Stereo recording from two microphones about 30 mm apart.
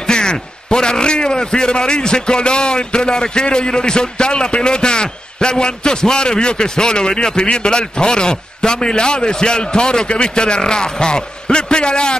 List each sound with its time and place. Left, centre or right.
0.0 s a man's voice: left